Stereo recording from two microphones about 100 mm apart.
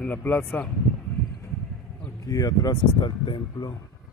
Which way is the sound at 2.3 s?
40° left (ahead or behind).